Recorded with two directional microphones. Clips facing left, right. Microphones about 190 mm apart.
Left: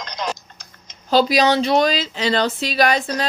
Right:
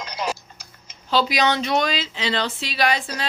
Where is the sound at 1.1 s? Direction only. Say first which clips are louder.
Left 5 dB; 40° left (ahead or behind).